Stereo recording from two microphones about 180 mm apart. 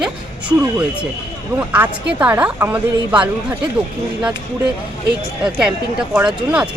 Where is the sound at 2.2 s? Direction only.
10° right (ahead or behind).